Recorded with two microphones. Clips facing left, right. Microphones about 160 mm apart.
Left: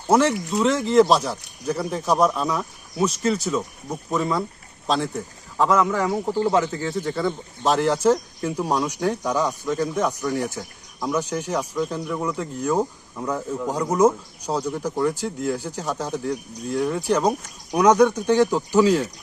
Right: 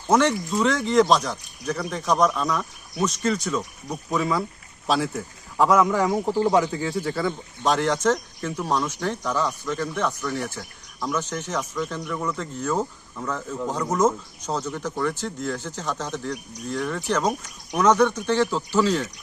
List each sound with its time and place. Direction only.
0.3 s speech: centre (ahead or behind)
1.7 s speech: 30° left (ahead or behind)
2.0 s speech: 10° left (ahead or behind)